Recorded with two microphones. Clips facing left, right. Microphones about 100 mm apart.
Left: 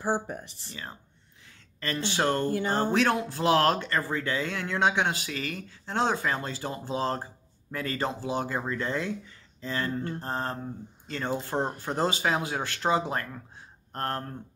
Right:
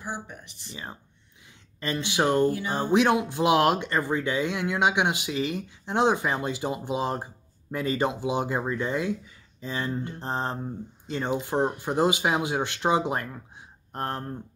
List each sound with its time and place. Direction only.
0.0 s speech: 40° left (ahead or behind)
1.8 s speech: 15° right (ahead or behind)